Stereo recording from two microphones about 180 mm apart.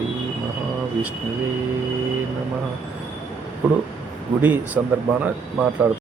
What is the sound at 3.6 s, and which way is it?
Speech, 10° right (ahead or behind).